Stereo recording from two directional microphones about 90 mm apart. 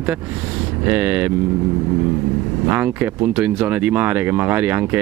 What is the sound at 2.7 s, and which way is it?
Speech, 20° right (ahead or behind).